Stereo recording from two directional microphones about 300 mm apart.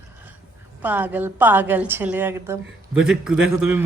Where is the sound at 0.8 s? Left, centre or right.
Centre.